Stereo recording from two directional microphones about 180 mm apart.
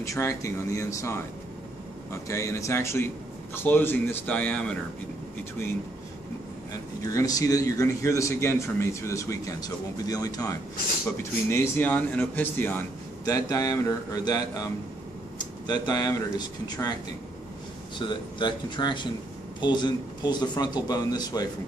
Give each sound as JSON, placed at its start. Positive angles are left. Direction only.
{"t": 0.0, "sound": "a man's voice", "side_deg": 15}
{"t": 2.2, "sound": "a man's voice", "side_deg": 15}
{"t": 7.0, "sound": "a man's voice", "side_deg": 20}
{"t": 17.9, "sound": "speech", "side_deg": 25}